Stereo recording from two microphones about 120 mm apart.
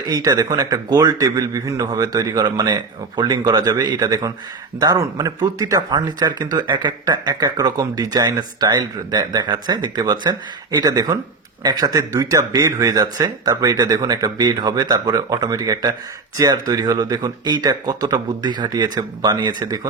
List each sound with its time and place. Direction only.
0.0 s speech: 30° right (ahead or behind)